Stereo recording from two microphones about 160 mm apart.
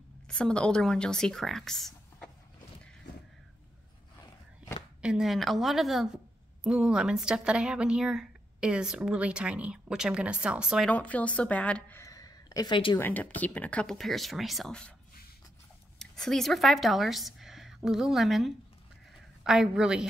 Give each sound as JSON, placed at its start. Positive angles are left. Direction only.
{"t": 0.3, "sound": "speech", "side_deg": 5}
{"t": 5.0, "sound": "a woman's voice", "side_deg": -5}
{"t": 10.9, "sound": "a woman's voice", "side_deg": 10}
{"t": 12.0, "sound": "a sound", "side_deg": 20}
{"t": 13.0, "sound": "a woman's voice", "side_deg": 10}
{"t": 16.0, "sound": "a woman's voice", "side_deg": 5}